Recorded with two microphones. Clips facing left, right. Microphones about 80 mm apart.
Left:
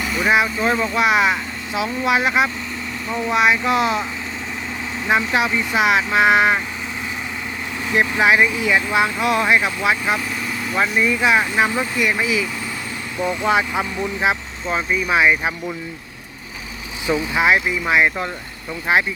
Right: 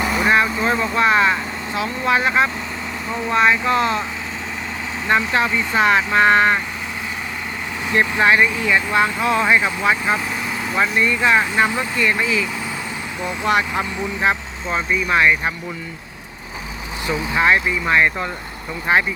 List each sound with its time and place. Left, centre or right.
0.0 s vehicle: right
0.4 s speech: centre
5.0 s speech: centre
7.9 s speech: centre
13.5 s speech: centre
14.2 s speech: centre
17.1 s speech: centre